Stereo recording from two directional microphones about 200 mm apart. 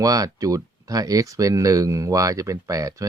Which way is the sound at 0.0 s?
15° right (ahead or behind).